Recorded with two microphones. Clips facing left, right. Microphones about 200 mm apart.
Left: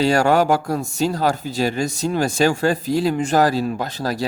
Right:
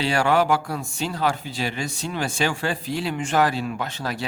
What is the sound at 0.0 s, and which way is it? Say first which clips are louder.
A man's voice: left 5 dB; 40° left (ahead or behind).